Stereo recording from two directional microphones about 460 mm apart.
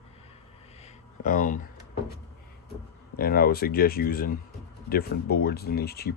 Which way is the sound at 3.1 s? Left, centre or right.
Centre.